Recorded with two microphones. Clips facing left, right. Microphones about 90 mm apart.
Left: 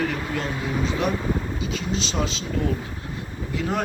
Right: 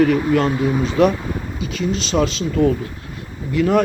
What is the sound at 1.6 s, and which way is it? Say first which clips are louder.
Speech: right 5 dB; 60° right (ahead or behind).